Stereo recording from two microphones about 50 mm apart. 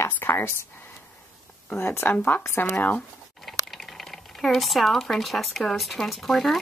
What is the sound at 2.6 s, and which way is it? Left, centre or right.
Speech, left.